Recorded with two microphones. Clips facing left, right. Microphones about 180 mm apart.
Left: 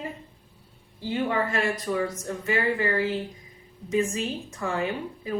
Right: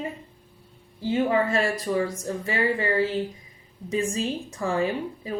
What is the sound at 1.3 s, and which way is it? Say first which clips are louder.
Speech: right 1 dB; 30° right (ahead or behind).